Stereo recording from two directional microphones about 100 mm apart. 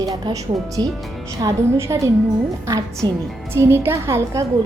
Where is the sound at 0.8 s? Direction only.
45° right (ahead or behind).